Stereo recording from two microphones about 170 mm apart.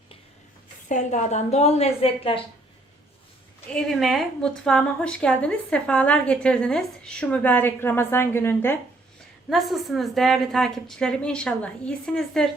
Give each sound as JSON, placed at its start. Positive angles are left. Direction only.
{"t": 0.9, "sound": "a woman's voice", "side_deg": 45}
{"t": 3.7, "sound": "a woman's voice", "side_deg": 5}
{"t": 9.5, "sound": "a woman's voice", "side_deg": 0}